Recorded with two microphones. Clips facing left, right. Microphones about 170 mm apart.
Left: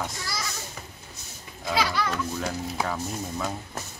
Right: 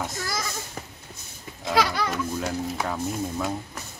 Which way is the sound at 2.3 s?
5° right (ahead or behind).